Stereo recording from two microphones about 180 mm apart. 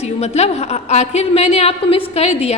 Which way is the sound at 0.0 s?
35° left (ahead or behind).